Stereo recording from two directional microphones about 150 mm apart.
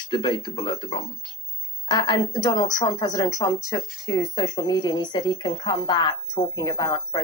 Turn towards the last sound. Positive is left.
turn(degrees=25)  # may be behind; listen again after turning